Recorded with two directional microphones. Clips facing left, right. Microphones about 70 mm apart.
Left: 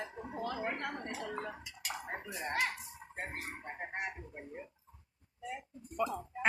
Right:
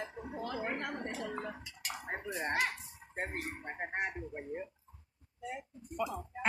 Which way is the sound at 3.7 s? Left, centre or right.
Right.